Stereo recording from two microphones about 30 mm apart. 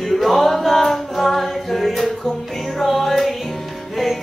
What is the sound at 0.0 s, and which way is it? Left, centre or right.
Music, centre.